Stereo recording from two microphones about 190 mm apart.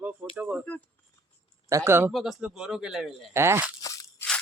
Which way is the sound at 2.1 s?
Centre (ahead or behind).